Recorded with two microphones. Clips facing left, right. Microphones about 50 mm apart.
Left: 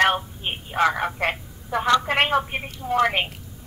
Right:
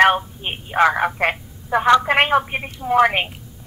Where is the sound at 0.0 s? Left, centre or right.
Centre.